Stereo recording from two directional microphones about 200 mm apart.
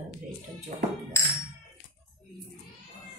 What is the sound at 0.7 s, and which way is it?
Music, 45° right (ahead or behind).